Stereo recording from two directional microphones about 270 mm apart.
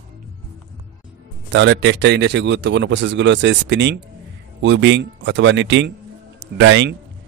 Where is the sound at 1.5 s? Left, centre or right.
Right.